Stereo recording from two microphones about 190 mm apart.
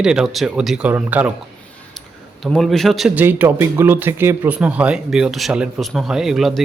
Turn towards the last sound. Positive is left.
turn(degrees=0)  # may be behind; listen again after turning